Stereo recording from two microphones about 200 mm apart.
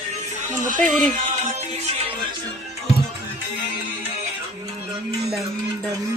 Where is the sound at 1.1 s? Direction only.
40° right (ahead or behind).